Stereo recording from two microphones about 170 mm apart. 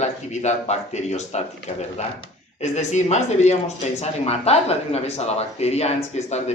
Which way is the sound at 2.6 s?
40° left (ahead or behind).